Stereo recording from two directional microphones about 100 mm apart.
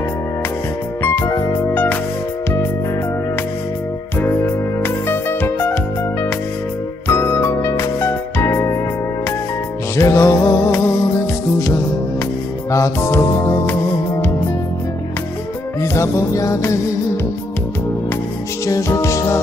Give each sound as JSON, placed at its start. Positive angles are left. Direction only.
{"t": 1.0, "sound": "music", "side_deg": 20}
{"t": 4.8, "sound": "music", "side_deg": 20}
{"t": 7.1, "sound": "music", "side_deg": 25}
{"t": 9.9, "sound": "music", "side_deg": 30}
{"t": 12.7, "sound": "music", "side_deg": 30}
{"t": 15.8, "sound": "music", "side_deg": 30}
{"t": 18.7, "sound": "music", "side_deg": 30}